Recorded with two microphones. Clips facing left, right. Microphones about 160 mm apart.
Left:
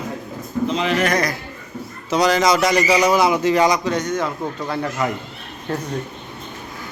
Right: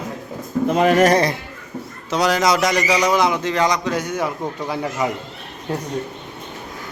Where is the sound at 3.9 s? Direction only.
10° right (ahead or behind).